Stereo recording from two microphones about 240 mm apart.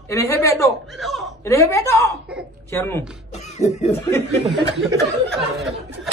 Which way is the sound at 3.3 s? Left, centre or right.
Left.